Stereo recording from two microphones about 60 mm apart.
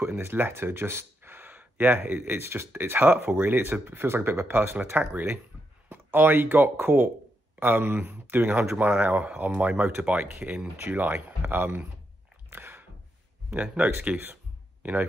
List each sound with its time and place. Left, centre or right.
0.0 s speech: right
12.4 s chewing: right
13.5 s speech: right
14.1 s a sound: right